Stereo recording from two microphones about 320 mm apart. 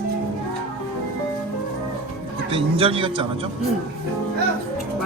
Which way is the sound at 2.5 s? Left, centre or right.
Centre.